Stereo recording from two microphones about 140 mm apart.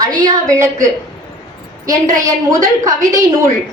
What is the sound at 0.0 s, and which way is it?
Speech, 25° right (ahead or behind).